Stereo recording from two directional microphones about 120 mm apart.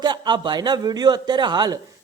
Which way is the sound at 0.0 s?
35° right (ahead or behind).